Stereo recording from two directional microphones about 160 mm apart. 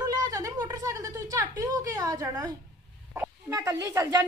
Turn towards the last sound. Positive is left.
turn(degrees=-20)  # may be behind; listen again after turning